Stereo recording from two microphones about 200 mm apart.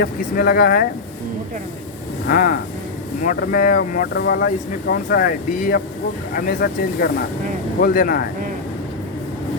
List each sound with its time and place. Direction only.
0.0 s speech: 50° left (ahead or behind)
2.2 s speech: 50° left (ahead or behind)